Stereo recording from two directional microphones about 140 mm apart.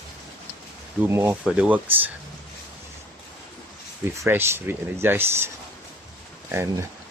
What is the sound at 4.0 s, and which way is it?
Speech, 15° right (ahead or behind).